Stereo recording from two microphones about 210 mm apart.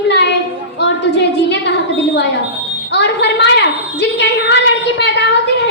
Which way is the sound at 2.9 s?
55° left (ahead or behind).